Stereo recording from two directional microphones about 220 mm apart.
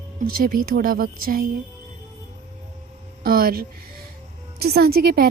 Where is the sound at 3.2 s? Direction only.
45° right (ahead or behind).